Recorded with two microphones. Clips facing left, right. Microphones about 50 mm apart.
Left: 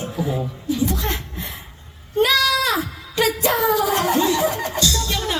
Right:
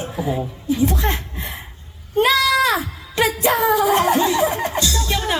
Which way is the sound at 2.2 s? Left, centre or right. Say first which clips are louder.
Right 2 dB; right.